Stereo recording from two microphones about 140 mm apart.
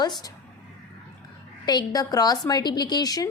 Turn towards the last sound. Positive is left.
turn(degrees=25)  # may be behind; listen again after turning